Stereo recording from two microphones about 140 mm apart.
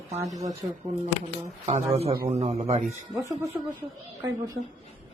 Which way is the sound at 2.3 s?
50° right (ahead or behind).